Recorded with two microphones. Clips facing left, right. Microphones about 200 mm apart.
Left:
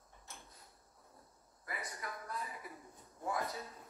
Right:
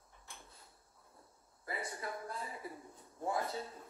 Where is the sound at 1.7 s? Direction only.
30° right (ahead or behind).